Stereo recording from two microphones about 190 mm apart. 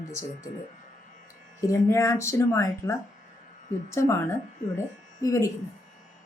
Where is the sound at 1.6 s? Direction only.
15° left (ahead or behind).